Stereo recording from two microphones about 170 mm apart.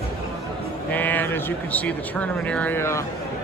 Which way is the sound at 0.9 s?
10° left (ahead or behind).